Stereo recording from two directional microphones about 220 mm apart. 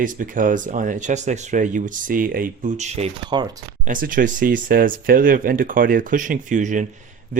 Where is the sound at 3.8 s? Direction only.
40° right (ahead or behind).